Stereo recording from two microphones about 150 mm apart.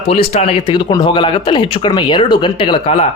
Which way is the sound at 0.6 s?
30° left (ahead or behind).